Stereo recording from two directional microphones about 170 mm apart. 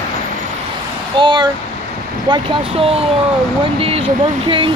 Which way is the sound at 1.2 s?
25° right (ahead or behind).